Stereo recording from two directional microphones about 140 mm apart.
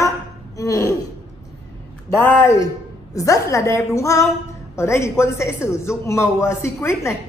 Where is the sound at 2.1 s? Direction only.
15° left (ahead or behind).